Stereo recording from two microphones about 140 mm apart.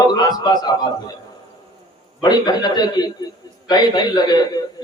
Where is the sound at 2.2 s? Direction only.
30° left (ahead or behind).